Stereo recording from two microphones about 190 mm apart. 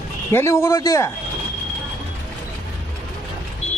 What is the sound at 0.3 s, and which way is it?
Speech, 15° left (ahead or behind).